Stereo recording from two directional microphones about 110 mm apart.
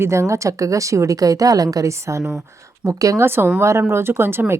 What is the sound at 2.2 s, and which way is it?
Speech, 5° right (ahead or behind).